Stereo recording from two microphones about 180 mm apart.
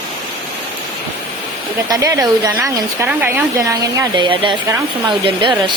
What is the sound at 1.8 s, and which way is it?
Speech, 20° right (ahead or behind).